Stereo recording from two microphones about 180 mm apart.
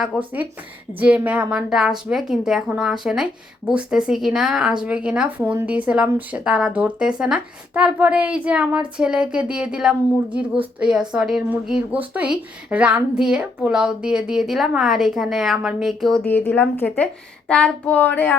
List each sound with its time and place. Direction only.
0.1 s a woman's voice: 5° right (ahead or behind); by 18.3 s 10° left (ahead or behind)